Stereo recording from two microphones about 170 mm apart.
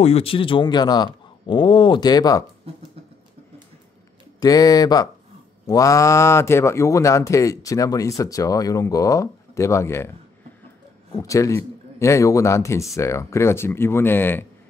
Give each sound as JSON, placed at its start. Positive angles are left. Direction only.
{"t": 0.0, "sound": "speech", "side_deg": 35}
{"t": 4.4, "sound": "speech", "side_deg": 20}
{"t": 11.1, "sound": "speech", "side_deg": 20}